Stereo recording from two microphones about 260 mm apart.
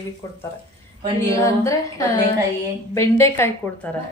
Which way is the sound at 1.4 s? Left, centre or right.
Centre.